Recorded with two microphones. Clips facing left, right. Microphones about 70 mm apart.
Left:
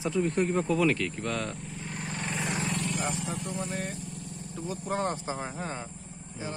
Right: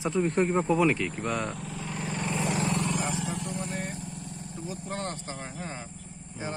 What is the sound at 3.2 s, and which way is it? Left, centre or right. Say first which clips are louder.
Speech: right 2 dB; right.